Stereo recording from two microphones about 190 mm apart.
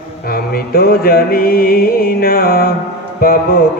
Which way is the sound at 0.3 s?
50° left (ahead or behind).